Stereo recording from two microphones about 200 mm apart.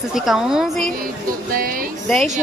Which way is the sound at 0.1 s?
Centre (ahead or behind).